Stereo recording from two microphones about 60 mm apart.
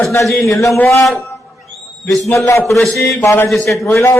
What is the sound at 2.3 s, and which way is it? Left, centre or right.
Speech, left.